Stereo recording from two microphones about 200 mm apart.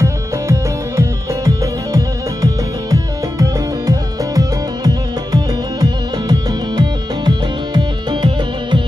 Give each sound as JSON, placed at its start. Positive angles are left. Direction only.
{"t": 0.0, "sound": "music", "side_deg": -15}